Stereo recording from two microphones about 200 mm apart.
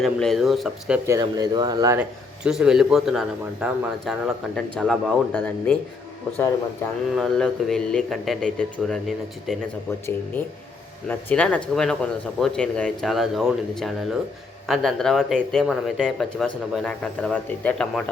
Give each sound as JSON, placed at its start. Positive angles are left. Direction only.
{"t": 0.0, "sound": "speech", "side_deg": 0}
{"t": 1.0, "sound": "speech", "side_deg": -15}
{"t": 2.0, "sound": "speech", "side_deg": -5}
{"t": 7.2, "sound": "speech", "side_deg": 0}